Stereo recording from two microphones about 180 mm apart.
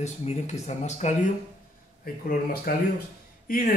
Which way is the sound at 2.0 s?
55° left (ahead or behind).